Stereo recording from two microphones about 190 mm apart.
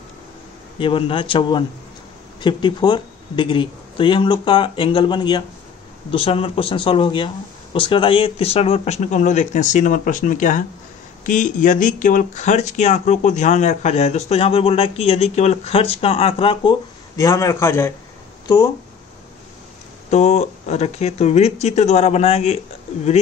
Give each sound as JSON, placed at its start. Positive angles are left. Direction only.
{"t": 0.7, "sound": "speech", "side_deg": 25}
{"t": 17.2, "sound": "a man's voice", "side_deg": 15}
{"t": 20.1, "sound": "speech", "side_deg": 35}